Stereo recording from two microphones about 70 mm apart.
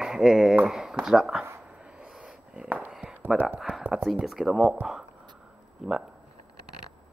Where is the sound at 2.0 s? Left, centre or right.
Centre.